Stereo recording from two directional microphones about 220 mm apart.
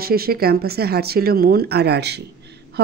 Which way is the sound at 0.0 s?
45° right (ahead or behind).